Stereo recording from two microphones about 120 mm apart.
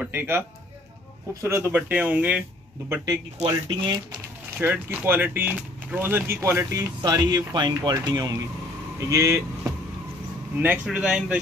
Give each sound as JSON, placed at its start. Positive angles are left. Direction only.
{"t": 0.0, "sound": "speech", "side_deg": -15}
{"t": 1.8, "sound": "speech", "side_deg": -10}
{"t": 3.4, "sound": "speech", "side_deg": -40}
{"t": 4.6, "sound": "speech", "side_deg": -15}
{"t": 10.6, "sound": "speech", "side_deg": -10}